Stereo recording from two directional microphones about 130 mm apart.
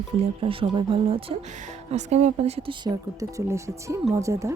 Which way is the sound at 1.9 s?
60° right (ahead or behind).